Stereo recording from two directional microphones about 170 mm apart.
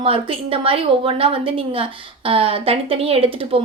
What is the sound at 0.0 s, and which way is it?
A woman's voice, 35° right (ahead or behind).